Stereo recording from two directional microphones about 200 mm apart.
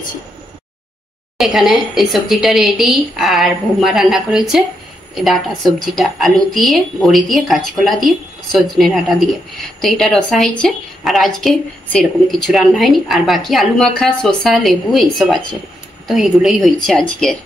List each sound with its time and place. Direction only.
1.4 s a woman's voice: centre (ahead or behind)